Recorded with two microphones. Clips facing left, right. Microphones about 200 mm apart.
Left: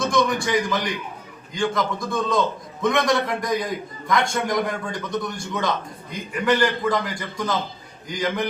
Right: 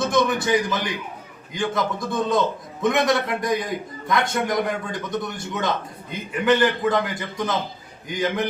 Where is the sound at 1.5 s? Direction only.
25° right (ahead or behind).